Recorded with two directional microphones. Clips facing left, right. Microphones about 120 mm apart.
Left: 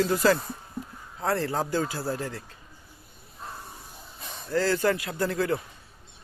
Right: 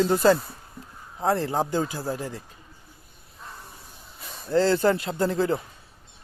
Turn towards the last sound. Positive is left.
turn(degrees=-25)  # may be behind; listen again after turning